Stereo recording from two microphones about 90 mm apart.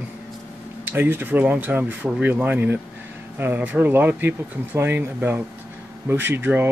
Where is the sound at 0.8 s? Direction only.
20° right (ahead or behind).